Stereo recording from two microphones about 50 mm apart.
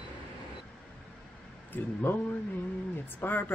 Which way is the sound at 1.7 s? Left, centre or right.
Left.